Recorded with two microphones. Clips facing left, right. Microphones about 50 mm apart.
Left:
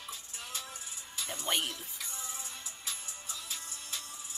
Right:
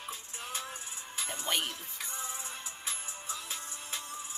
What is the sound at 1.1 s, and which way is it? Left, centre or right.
Music, right.